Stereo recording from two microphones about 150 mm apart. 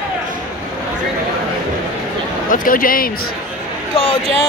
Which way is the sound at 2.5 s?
70° left (ahead or behind).